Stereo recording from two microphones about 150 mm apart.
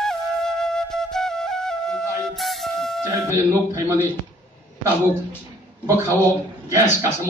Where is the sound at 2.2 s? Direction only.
Centre (ahead or behind).